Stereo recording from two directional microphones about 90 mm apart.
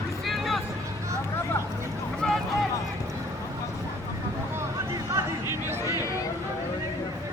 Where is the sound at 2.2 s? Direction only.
5° left (ahead or behind).